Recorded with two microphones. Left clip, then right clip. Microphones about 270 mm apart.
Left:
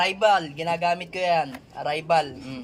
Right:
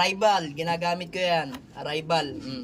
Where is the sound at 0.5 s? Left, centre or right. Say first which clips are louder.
Left 3 dB; centre.